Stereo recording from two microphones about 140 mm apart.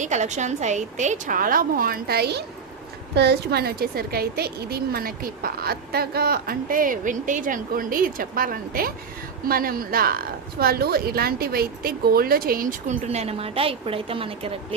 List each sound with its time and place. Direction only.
0.0 s a woman's voice: 55° right (ahead or behind); by 2.1 s 90° right
3.5 s a woman's voice: 90° right
13.1 s a woman's voice: 45° right (ahead or behind)